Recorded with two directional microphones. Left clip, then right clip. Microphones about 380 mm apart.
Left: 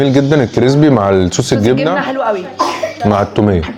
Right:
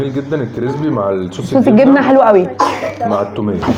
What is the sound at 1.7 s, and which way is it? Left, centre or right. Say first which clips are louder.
Speech: right 6 dB; right.